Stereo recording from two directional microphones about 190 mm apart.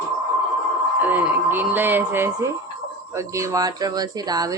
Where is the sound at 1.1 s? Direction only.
10° right (ahead or behind).